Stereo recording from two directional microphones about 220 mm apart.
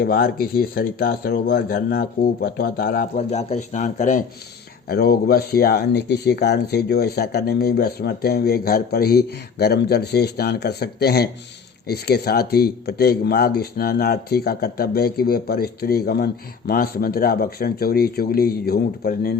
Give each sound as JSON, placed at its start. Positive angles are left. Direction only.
{"t": 0.0, "sound": "speech", "side_deg": 45}
{"t": 4.9, "sound": "speech", "side_deg": 45}